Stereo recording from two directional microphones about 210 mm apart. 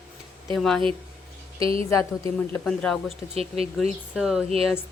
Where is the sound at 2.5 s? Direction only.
5° left (ahead or behind).